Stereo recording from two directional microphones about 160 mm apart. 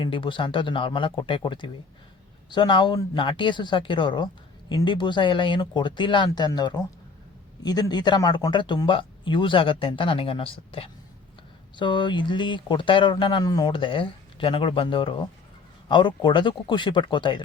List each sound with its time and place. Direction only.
0.0 s speech: 30° left (ahead or behind)